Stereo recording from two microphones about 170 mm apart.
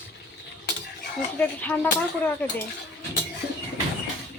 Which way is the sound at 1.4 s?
10° left (ahead or behind).